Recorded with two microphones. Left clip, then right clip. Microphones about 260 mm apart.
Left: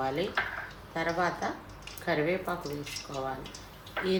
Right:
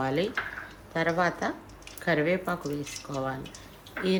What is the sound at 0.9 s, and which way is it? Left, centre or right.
Speech, right.